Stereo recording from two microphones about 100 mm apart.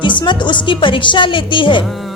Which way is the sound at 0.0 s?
55° left (ahead or behind).